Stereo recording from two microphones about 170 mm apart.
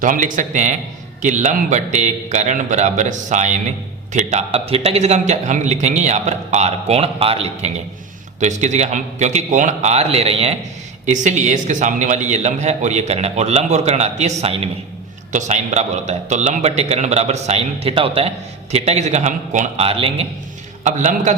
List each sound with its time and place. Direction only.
0.0 s a man's voice: 50° right (ahead or behind); by 20.2 s 35° right (ahead or behind)
20.8 s a man's voice: 45° right (ahead or behind)